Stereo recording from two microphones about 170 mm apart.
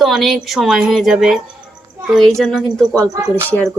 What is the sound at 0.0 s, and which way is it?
A woman's voice, centre (ahead or behind).